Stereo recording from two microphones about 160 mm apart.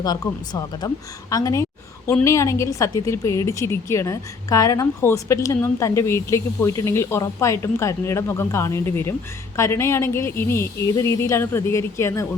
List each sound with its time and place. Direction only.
0.0 s a woman's voice: 25° left (ahead or behind)